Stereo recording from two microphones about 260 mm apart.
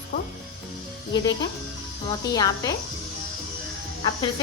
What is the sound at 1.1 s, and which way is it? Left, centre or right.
A woman's voice, centre.